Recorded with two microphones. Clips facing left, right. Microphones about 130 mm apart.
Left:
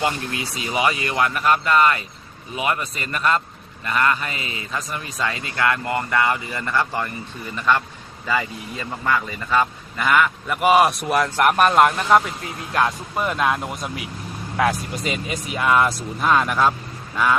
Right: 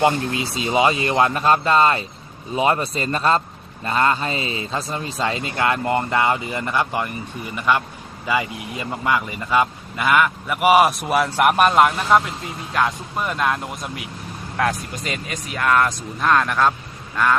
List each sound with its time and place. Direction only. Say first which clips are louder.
0.0 s a man's voice: right 5 dB; 25° right (ahead or behind); by 16.7 s 5° left (ahead or behind)